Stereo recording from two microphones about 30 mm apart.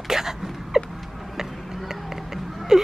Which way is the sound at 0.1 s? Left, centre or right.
Centre.